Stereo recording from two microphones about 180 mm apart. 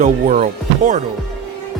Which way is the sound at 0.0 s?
40° right (ahead or behind).